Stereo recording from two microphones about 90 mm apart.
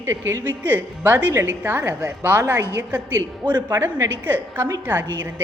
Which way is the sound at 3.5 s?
45° right (ahead or behind).